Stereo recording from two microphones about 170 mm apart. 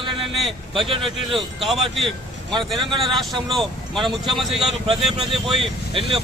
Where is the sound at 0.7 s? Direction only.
30° right (ahead or behind).